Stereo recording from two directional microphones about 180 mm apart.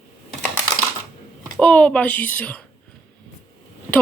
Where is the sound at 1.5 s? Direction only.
10° left (ahead or behind).